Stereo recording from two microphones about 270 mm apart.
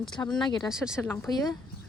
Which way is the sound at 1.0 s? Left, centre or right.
Centre.